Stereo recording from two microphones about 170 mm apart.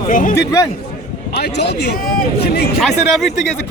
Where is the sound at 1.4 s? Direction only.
85° left; by 2.6 s 65° left (ahead or behind).